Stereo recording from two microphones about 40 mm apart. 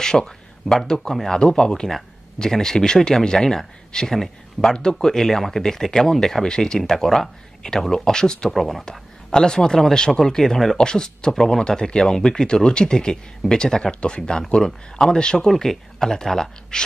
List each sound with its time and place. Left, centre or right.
0.0 s speech: centre
8.5 s speech: centre
9.3 s speech: centre
10.8 s speech: centre
14.6 s speech: centre
15.1 s speech: left
15.4 s speech: centre